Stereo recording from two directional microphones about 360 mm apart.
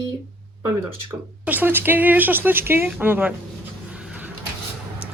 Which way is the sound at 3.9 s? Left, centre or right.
Centre.